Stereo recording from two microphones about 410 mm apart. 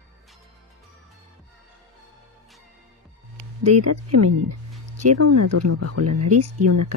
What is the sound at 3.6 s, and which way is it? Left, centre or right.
Speech, right.